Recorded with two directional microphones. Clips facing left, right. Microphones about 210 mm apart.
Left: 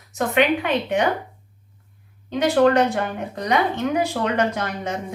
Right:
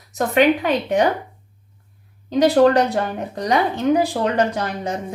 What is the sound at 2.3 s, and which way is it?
A woman's voice, 35° right (ahead or behind).